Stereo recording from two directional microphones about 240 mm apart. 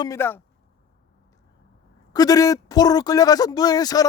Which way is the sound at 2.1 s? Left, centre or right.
Centre.